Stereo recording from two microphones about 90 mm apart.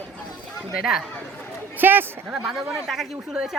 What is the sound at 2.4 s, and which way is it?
Speech, 5° right (ahead or behind).